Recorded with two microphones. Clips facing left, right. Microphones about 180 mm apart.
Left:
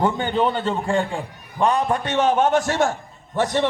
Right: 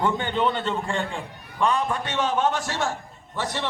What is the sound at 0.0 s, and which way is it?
A man's voice, 40° left (ahead or behind).